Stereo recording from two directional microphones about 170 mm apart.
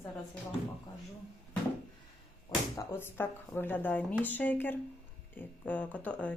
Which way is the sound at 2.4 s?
15° left (ahead or behind).